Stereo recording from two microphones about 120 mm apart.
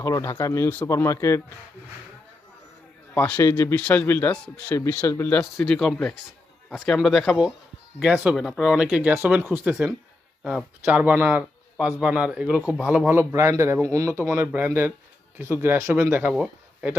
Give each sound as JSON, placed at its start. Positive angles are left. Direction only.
{"t": 0.0, "sound": "speech", "side_deg": 25}
{"t": 3.3, "sound": "speech", "side_deg": 25}
{"t": 3.8, "sound": "speech", "side_deg": 10}
{"t": 5.6, "sound": "speech", "side_deg": 5}
{"t": 10.4, "sound": "speech", "side_deg": -5}
{"t": 13.1, "sound": "speech", "side_deg": -20}